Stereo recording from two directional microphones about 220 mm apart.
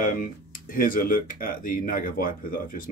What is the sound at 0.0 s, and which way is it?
Speech, 40° left (ahead or behind).